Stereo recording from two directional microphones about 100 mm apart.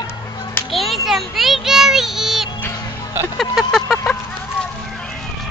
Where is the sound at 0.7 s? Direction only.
Centre (ahead or behind).